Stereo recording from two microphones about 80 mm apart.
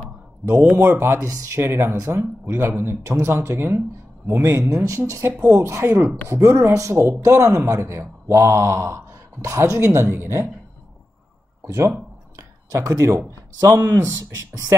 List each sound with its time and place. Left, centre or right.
0.5 s speech: right
11.6 s speech: right